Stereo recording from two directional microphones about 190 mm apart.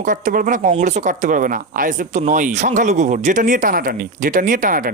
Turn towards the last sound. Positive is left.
turn(degrees=-45)  # may be behind; listen again after turning